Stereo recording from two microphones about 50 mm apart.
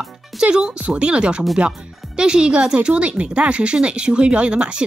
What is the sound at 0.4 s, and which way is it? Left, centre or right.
Speech, right.